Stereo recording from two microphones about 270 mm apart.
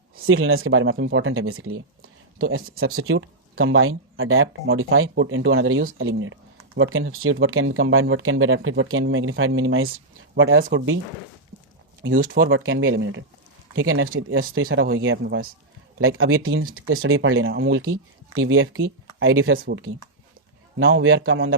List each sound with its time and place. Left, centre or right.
0.2 s speech: right
12.1 s speech: right
19.5 s speech: right
20.7 s speech: right